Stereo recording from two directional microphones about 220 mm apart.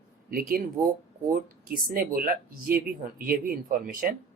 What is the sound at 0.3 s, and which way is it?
Speech, 40° right (ahead or behind).